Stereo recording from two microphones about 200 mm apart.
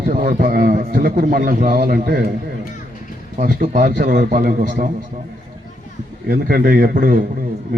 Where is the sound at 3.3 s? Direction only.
40° right (ahead or behind).